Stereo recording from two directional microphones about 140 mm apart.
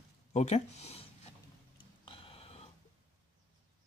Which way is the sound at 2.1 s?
40° left (ahead or behind).